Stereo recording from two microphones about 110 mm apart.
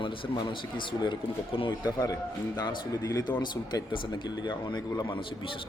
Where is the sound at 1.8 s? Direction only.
35° left (ahead or behind).